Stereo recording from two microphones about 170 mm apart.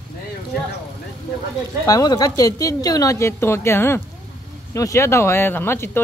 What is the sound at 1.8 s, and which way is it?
Speech, 20° left (ahead or behind).